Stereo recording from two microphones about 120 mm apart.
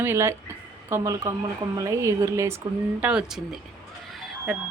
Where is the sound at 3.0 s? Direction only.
5° right (ahead or behind).